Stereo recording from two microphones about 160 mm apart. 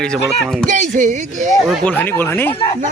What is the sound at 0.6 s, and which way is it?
Speech, 50° right (ahead or behind).